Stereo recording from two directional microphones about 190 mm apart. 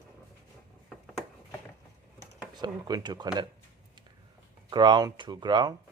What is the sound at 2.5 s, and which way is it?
Speech, 20° right (ahead or behind).